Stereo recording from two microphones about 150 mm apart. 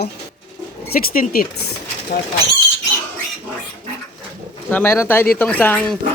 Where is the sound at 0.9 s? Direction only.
80° left.